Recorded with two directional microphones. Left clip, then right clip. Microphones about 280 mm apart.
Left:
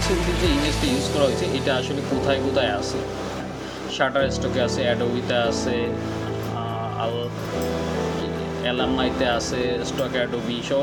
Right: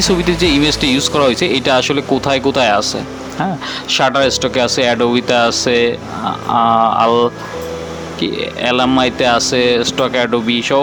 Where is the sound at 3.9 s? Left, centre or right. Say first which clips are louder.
Right 9 dB; right.